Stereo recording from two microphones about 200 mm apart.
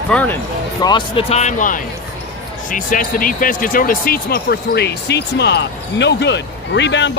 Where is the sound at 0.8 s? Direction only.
25° left (ahead or behind).